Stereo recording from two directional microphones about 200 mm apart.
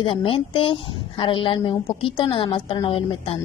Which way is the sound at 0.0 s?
25° left (ahead or behind).